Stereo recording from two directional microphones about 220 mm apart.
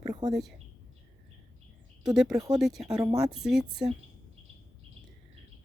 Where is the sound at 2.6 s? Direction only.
Centre (ahead or behind).